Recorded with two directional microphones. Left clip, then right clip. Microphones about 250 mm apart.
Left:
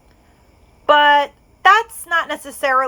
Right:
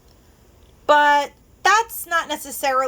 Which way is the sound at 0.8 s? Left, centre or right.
Centre.